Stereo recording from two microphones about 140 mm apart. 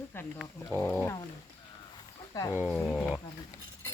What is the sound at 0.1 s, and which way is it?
Speech, 15° left (ahead or behind).